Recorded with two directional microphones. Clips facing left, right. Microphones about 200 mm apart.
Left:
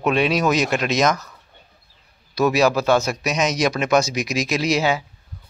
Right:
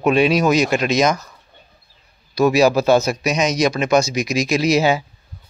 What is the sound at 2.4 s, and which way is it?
Speech, centre (ahead or behind).